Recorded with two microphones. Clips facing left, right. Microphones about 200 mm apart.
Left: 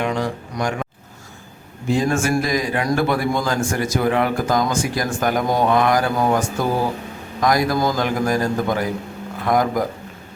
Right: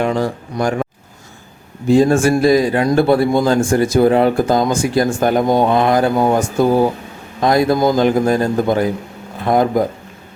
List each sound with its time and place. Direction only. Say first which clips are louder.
0.0 s speech: right 5 dB; 35° right (ahead or behind)
1.9 s speech: right 7 dB; 35° right (ahead or behind)